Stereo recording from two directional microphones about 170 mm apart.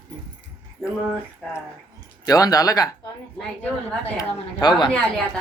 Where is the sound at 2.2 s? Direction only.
20° left (ahead or behind).